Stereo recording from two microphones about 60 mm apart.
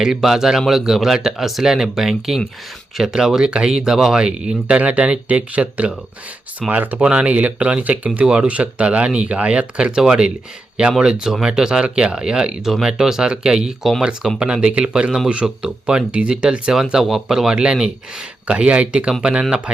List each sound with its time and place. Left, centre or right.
0.0 s speech: centre